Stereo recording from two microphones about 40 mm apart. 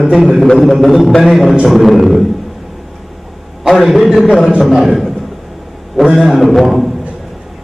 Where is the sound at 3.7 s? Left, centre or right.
Centre.